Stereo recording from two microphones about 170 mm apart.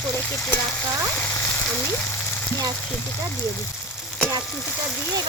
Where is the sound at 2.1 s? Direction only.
15° left (ahead or behind).